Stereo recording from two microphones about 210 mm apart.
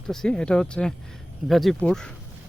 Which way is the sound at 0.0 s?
5° left (ahead or behind).